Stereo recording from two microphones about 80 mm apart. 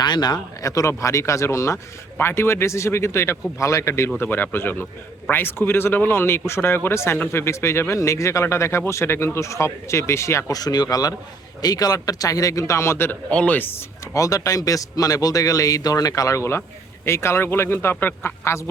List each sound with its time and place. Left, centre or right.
0.0 s speech: left
0.7 s speech: left
10.5 s speech: left
13.3 s speech: centre
13.7 s speech: left